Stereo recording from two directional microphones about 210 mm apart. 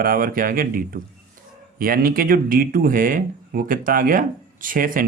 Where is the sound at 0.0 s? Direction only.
45° right (ahead or behind).